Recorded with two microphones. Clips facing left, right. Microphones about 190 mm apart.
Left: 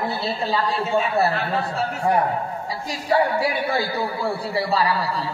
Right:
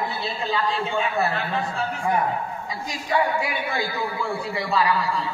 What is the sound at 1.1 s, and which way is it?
Speech, 35° left (ahead or behind).